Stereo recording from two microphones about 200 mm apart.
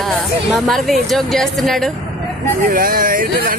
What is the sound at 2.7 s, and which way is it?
Speech, 45° right (ahead or behind).